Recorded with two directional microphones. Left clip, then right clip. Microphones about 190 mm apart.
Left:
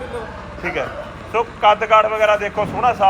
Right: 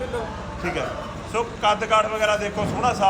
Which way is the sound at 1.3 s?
15° right (ahead or behind).